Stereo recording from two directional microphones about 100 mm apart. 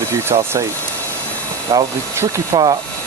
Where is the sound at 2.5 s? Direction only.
50° right (ahead or behind).